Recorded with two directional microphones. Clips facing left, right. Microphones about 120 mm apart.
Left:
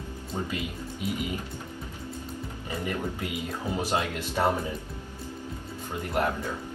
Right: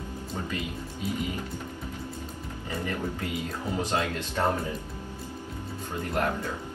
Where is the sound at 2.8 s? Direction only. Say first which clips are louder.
Even; 20° left (ahead or behind).